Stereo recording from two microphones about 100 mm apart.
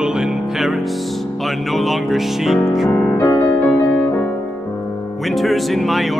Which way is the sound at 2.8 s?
20° left (ahead or behind).